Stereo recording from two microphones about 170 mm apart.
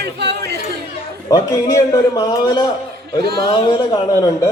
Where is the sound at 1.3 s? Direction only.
20° left (ahead or behind).